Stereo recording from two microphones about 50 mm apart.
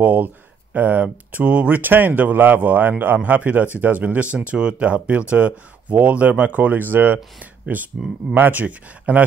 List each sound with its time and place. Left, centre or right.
0.0 s speech: right
8.0 s speech: centre
8.4 s speech: right